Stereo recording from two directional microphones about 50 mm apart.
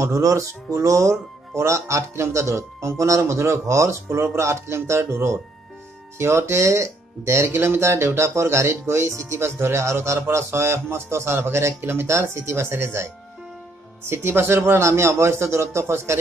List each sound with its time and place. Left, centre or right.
0.0 s speech: right